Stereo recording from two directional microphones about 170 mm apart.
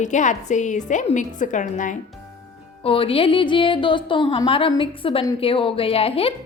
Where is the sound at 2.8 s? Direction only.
35° left (ahead or behind).